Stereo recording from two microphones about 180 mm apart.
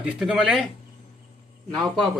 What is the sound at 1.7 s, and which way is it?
Speech, centre (ahead or behind).